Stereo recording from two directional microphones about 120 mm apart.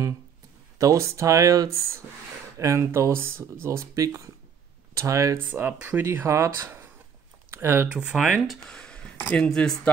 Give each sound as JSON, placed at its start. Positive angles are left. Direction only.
{"t": 0.7, "sound": "speech", "side_deg": -25}
{"t": 5.5, "sound": "speech", "side_deg": -15}
{"t": 8.6, "sound": "speech", "side_deg": 10}